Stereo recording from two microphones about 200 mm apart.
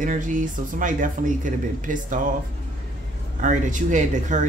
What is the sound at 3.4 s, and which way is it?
Speech, 40° right (ahead or behind).